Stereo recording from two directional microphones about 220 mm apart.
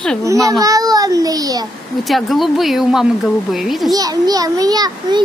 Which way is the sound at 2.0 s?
Centre (ahead or behind).